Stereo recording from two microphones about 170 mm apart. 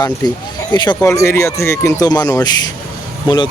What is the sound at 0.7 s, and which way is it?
Speech, 20° left (ahead or behind).